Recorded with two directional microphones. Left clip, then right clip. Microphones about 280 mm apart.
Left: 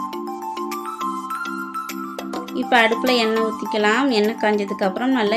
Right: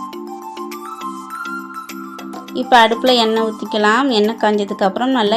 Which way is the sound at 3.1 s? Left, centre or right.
Centre.